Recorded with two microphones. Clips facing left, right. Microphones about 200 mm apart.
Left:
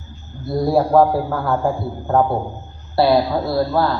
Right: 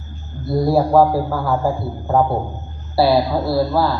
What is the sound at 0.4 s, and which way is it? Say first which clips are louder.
A man's voice: right 1 dB; centre (ahead or behind).